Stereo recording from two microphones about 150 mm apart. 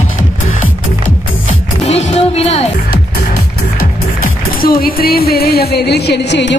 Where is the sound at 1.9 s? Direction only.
45° left (ahead or behind).